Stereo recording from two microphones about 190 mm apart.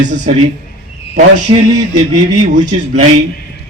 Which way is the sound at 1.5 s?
30° right (ahead or behind).